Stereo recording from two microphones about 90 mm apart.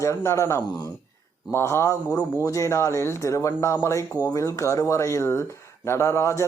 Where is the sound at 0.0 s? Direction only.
30° left (ahead or behind).